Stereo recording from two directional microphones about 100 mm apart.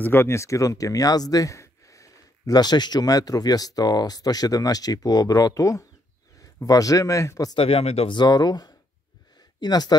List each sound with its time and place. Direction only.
0.0 s speech: 25° left (ahead or behind)
7.5 s speech: 70° left (ahead or behind)
8.1 s speech: 45° left (ahead or behind)